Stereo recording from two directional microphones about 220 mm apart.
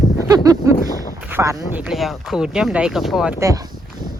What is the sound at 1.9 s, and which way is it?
Speech, centre (ahead or behind).